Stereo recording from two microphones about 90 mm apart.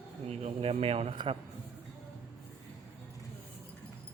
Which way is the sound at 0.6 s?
90° right.